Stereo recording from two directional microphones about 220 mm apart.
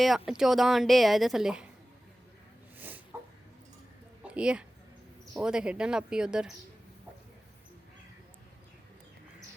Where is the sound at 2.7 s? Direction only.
10° right (ahead or behind).